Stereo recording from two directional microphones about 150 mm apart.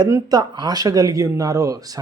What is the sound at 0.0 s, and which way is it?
Speech, 25° right (ahead or behind).